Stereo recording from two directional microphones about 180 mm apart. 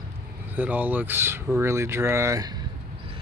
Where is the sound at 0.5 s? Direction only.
10° right (ahead or behind).